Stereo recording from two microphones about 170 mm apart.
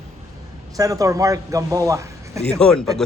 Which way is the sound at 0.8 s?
20° right (ahead or behind).